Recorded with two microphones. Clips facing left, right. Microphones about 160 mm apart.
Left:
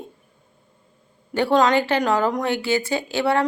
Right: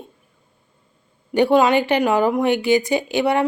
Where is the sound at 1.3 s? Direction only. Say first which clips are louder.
Right 3 dB; 15° right (ahead or behind).